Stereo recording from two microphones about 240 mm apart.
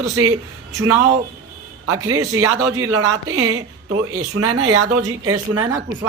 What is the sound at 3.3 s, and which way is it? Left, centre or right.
A woman's voice, right.